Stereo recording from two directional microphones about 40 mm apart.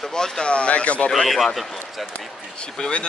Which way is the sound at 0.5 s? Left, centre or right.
Left.